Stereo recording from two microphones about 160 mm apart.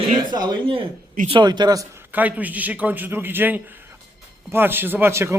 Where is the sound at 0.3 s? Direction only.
25° right (ahead or behind).